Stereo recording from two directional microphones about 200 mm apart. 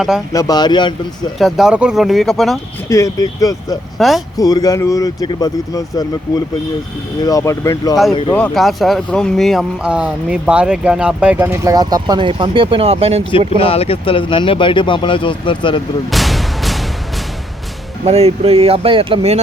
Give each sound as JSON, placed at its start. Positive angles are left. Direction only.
{"t": 0.3, "sound": "speech", "side_deg": 20}
{"t": 1.4, "sound": "speech", "side_deg": 0}
{"t": 2.9, "sound": "speech", "side_deg": 15}
{"t": 3.9, "sound": "speech", "side_deg": 0}
{"t": 4.4, "sound": "speech", "side_deg": 20}
{"t": 13.6, "sound": "speech", "side_deg": 30}
{"t": 16.1, "sound": "artillery fire", "side_deg": 0}
{"t": 18.0, "sound": "speech", "side_deg": -30}